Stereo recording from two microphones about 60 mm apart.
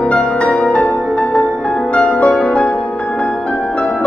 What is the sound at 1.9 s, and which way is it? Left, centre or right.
Music, centre.